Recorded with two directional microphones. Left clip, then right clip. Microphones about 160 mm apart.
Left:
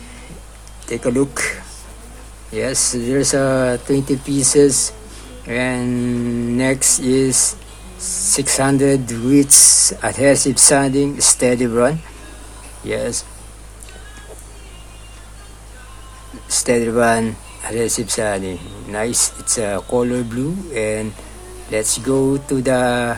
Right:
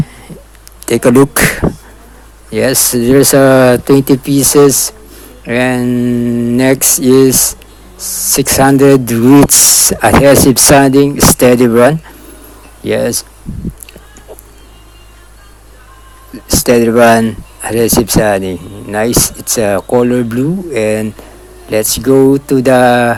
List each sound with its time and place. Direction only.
0.9 s speech: 60° right (ahead or behind); by 13.2 s 45° right (ahead or behind)
16.5 s speech: 40° right (ahead or behind)